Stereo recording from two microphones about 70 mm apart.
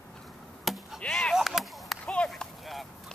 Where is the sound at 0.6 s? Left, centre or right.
Centre.